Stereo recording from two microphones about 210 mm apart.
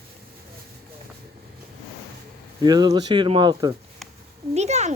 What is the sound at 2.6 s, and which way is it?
Speech, 20° right (ahead or behind).